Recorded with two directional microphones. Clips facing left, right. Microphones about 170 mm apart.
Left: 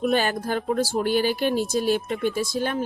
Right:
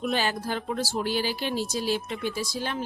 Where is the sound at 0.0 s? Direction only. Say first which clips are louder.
Left 5 dB; 50° left (ahead or behind).